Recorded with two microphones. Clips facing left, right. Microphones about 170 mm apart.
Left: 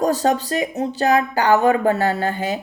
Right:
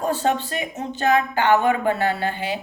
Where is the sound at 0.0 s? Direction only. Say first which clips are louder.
Left 4 dB; 40° left (ahead or behind).